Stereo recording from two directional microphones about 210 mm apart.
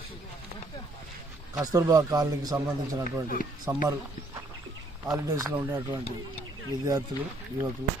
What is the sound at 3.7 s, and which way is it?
Speech, 15° right (ahead or behind).